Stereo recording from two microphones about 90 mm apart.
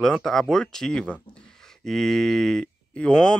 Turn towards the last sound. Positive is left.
turn(degrees=10)  # may be behind; listen again after turning